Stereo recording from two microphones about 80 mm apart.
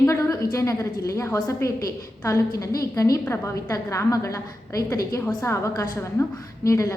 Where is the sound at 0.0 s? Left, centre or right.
Left.